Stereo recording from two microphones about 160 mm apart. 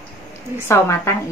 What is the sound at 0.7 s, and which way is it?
Speech, 15° left (ahead or behind).